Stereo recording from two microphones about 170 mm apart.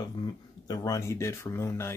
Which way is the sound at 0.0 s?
25° left (ahead or behind).